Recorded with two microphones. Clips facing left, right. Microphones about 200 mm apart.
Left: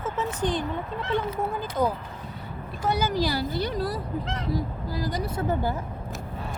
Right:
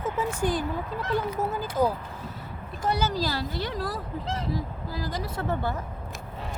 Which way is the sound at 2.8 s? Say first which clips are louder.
Left 2 dB; 10° left (ahead or behind).